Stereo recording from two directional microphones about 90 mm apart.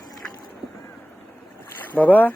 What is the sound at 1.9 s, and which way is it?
Speech, 20° left (ahead or behind).